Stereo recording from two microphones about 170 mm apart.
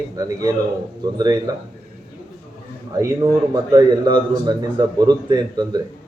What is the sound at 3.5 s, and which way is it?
Speech, 25° right (ahead or behind).